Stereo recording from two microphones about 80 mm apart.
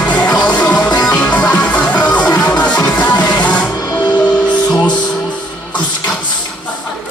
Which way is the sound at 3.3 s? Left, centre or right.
Centre.